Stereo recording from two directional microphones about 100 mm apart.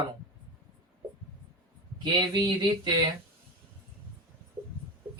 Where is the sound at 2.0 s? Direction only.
45° right (ahead or behind).